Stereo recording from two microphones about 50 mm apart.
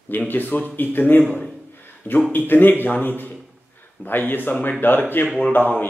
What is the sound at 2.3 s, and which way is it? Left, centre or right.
Speech, left.